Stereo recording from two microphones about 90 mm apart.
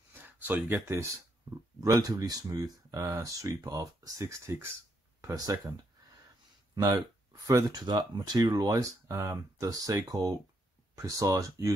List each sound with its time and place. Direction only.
0.1 s a sound: 20° right (ahead or behind)
0.9 s speech: 35° right (ahead or behind)
3.0 s speech: 35° right (ahead or behind)
5.2 s speech: 45° right (ahead or behind)
6.7 s a sound: 50° right (ahead or behind)
7.4 s speech: 45° right (ahead or behind)